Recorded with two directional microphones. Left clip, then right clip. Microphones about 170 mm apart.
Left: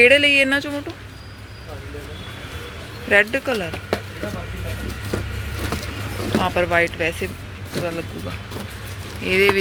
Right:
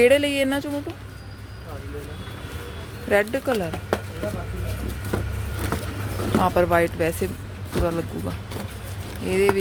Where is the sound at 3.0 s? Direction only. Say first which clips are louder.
Left 4 dB; 15° right (ahead or behind).